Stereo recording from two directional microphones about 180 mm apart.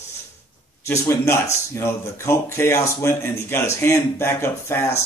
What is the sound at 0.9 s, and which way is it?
Speech, 15° left (ahead or behind).